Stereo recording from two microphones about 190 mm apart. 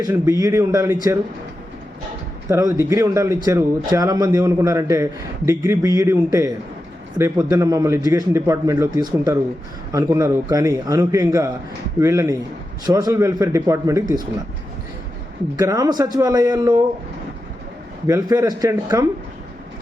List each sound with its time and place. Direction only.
0.0 s speech: 15° right (ahead or behind)
2.5 s speech: 15° right (ahead or behind)
15.5 s speech: 20° right (ahead or behind)
18.0 s speech: 15° right (ahead or behind)